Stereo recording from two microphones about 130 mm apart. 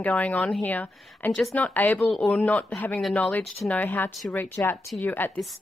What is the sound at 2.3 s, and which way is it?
Speech, 10° left (ahead or behind).